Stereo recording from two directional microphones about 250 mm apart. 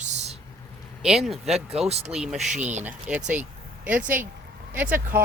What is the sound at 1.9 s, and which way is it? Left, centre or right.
Speech, right.